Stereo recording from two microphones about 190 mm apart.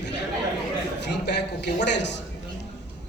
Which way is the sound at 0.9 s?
65° left (ahead or behind).